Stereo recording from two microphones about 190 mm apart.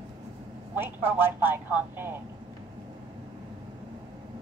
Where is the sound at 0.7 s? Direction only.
10° right (ahead or behind).